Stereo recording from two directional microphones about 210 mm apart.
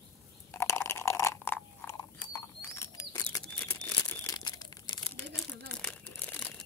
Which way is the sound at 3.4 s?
5° left (ahead or behind).